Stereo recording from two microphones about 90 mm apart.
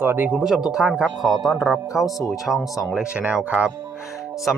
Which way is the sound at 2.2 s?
40° left (ahead or behind).